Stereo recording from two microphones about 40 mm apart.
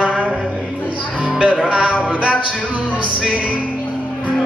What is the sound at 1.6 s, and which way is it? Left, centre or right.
Speech, right.